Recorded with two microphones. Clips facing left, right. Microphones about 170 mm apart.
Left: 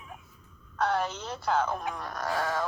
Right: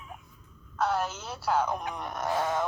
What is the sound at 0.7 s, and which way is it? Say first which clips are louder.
Speech: even; 5° right (ahead or behind).